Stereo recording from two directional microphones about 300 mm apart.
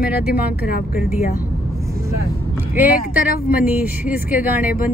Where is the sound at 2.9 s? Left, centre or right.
Left.